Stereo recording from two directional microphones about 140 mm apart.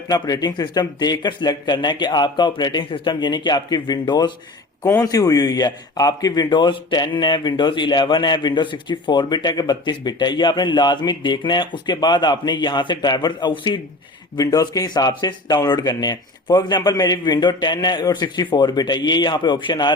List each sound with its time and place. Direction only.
0.1 s a man's voice: 30° left (ahead or behind)